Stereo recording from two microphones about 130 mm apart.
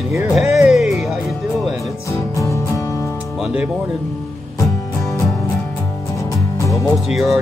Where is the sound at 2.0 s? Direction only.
25° left (ahead or behind).